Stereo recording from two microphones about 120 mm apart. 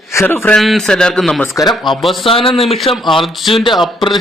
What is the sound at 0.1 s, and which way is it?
Speech, 20° left (ahead or behind).